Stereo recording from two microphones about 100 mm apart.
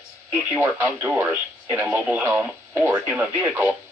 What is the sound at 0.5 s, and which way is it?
Speech, 20° right (ahead or behind).